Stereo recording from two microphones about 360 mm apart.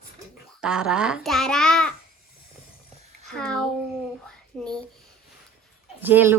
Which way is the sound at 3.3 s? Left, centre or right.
Centre.